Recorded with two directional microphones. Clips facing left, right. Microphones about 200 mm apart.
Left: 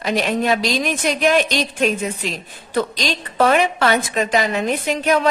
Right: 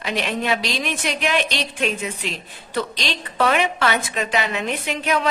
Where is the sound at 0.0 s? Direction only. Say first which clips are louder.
Left 5 dB; 40° left (ahead or behind).